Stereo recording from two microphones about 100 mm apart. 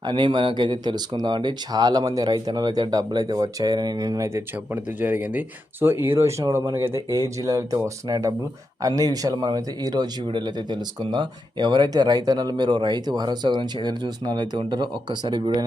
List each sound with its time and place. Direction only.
0.0 s speech: 50° right (ahead or behind)
4.7 s speech: 20° right (ahead or behind); by 15.6 s 50° right (ahead or behind)